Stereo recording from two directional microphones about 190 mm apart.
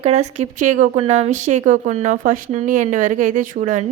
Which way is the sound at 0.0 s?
35° right (ahead or behind).